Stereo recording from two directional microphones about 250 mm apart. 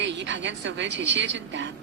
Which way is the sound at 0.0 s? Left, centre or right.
Right.